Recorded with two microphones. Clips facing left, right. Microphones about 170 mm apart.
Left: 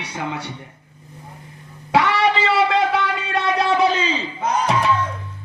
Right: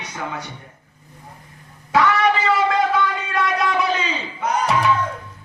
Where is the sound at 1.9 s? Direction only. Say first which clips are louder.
Even; 25° left (ahead or behind).